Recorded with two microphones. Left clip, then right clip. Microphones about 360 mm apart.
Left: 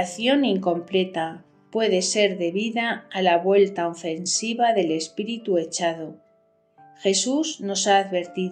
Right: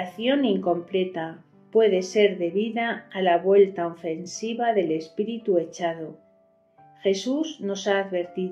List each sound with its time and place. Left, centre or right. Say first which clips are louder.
0.0 s speech: left 2 dB; left
7.0 s speech: left 2 dB; left